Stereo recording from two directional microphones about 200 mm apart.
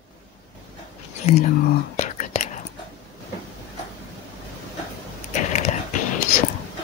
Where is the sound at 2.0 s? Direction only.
40° left (ahead or behind).